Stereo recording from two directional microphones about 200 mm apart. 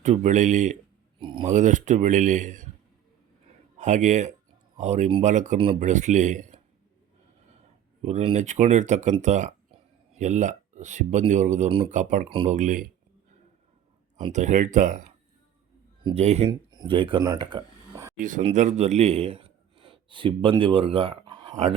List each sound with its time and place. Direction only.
0.0 s speech: 35° right (ahead or behind)
1.2 s speech: 25° right (ahead or behind)
1.5 s speech: 40° right (ahead or behind)
3.8 s speech: 35° right (ahead or behind)
8.0 s speech: 30° right (ahead or behind)
14.3 s speech: 35° right (ahead or behind)
16.5 s speech: 20° right (ahead or behind)
18.2 s a man's voice: 40° right (ahead or behind); by 21.5 s 20° right (ahead or behind)
21.5 s speech: 35° right (ahead or behind)